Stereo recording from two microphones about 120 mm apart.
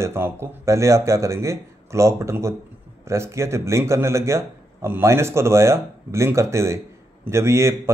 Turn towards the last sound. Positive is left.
turn(degrees=-20)  # may be behind; listen again after turning